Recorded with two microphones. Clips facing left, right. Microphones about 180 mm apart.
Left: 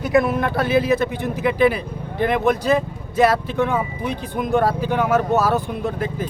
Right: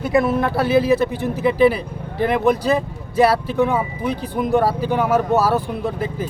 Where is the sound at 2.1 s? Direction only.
5° right (ahead or behind).